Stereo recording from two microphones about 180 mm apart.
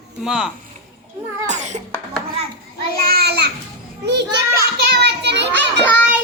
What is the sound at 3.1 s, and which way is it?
A child's voice, 60° right (ahead or behind).